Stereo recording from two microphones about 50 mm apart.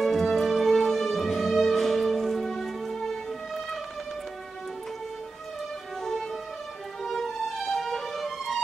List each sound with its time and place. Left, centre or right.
0.0 s music: centre
7.0 s music: centre